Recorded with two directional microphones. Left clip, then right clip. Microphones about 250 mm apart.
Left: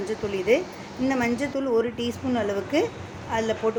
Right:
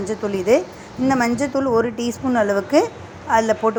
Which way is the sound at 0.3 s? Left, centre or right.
Right.